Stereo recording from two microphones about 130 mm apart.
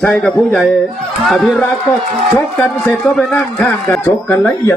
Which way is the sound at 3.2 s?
5° left (ahead or behind).